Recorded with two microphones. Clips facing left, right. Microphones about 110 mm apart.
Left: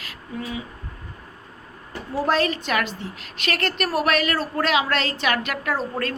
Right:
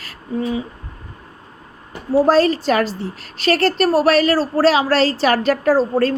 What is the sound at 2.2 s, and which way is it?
A woman's voice, 35° right (ahead or behind).